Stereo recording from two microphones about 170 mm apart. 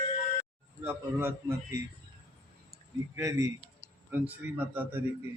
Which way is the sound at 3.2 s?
20° right (ahead or behind).